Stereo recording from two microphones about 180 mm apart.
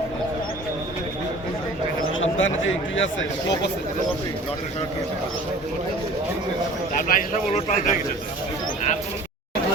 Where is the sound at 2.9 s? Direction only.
90° left.